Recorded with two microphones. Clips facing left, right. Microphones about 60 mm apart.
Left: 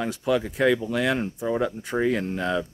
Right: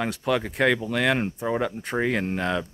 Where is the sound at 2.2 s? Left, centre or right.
Right.